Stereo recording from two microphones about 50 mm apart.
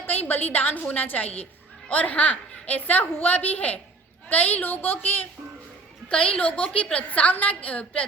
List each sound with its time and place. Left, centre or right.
0.0 s a woman's voice: left
6.1 s a woman's voice: centre